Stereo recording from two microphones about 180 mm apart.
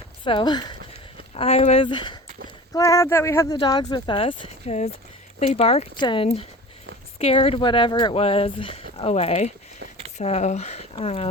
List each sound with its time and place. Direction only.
0.3 s speech: 25° left (ahead or behind)
1.3 s speech: 35° left (ahead or behind)